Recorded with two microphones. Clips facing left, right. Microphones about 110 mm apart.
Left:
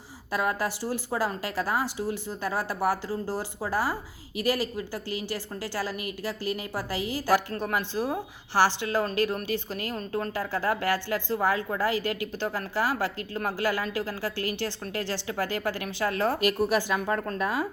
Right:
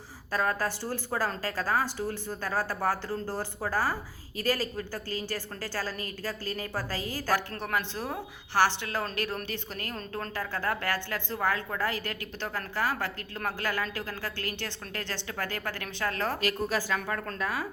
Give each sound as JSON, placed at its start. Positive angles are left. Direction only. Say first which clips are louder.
{"t": 0.3, "sound": "a woman's voice", "louder": "left 1 dB", "side_deg": 15}
{"t": 15.3, "sound": "a woman's voice", "louder": "left 6 dB", "side_deg": 15}